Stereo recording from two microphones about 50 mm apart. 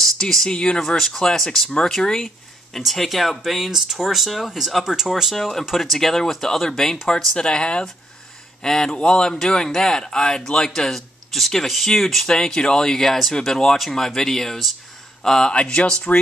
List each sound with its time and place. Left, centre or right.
0.0 s a sound: centre
0.5 s speech: centre
5.4 s speech: centre
15.5 s speech: left